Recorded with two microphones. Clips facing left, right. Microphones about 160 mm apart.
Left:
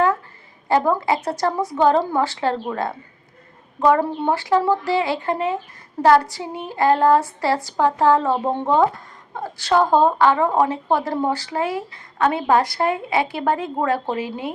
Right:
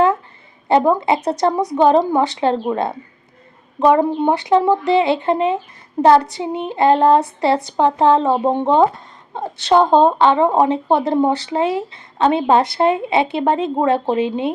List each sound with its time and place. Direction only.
0.7 s speech: 20° right (ahead or behind)